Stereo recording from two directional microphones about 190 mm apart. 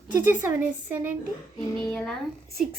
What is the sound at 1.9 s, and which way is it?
Speech, 5° left (ahead or behind).